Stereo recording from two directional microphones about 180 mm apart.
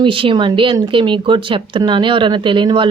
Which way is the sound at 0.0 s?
30° right (ahead or behind).